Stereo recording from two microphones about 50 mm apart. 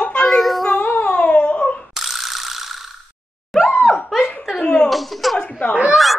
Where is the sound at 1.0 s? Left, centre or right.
Left.